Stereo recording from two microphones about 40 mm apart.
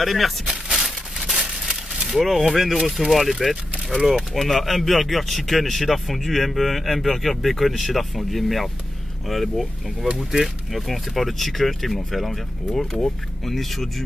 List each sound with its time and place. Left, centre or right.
0.0 s speech: centre
0.7 s crumpling: centre
4.4 s speech: centre